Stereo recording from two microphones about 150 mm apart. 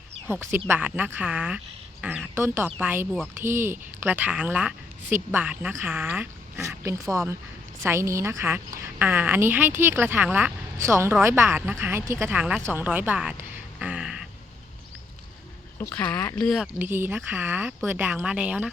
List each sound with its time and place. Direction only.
0.3 s a woman's voice: 15° right (ahead or behind)
12.4 s a woman's voice: 5° right (ahead or behind)
12.6 s a sound: 10° right (ahead or behind)
16.0 s speech: 10° left (ahead or behind)
16.7 s a woman's voice: 15° right (ahead or behind)